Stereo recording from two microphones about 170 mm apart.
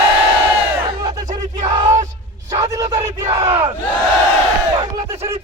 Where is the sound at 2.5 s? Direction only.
20° right (ahead or behind).